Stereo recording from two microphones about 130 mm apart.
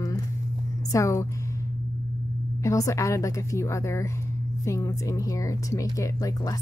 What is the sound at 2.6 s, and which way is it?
Speech, 25° left (ahead or behind).